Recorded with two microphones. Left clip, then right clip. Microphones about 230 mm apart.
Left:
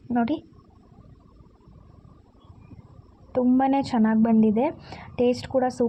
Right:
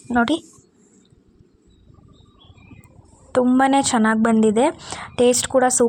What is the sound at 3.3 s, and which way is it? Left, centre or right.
A woman's voice, centre.